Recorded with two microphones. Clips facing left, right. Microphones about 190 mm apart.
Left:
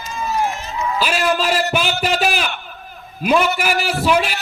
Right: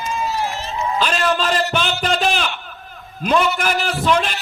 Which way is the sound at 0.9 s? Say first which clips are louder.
Left 1 dB; 10° left (ahead or behind).